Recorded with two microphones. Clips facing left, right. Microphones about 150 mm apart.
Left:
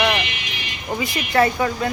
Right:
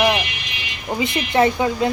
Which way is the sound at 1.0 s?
25° right (ahead or behind).